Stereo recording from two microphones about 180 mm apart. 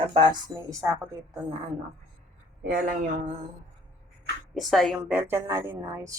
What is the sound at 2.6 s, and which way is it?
Speech, 50° right (ahead or behind).